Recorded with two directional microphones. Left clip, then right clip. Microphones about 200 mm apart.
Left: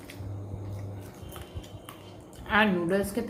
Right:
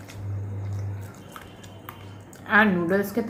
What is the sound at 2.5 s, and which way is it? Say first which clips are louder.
Speech: right 5 dB; 20° right (ahead or behind).